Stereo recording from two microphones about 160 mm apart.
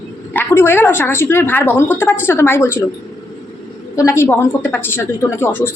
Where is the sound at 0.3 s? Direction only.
15° left (ahead or behind).